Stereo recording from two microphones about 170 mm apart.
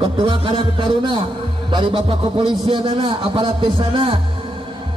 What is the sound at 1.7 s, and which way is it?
A man's voice, 30° right (ahead or behind).